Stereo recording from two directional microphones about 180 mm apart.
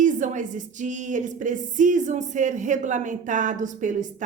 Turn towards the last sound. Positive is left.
turn(degrees=-45)  # may be behind; listen again after turning